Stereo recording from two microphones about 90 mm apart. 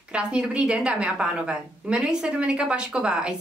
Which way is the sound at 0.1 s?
10° right (ahead or behind).